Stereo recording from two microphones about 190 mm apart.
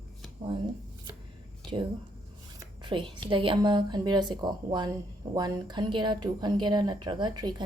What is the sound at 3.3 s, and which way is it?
A woman's voice, 25° right (ahead or behind).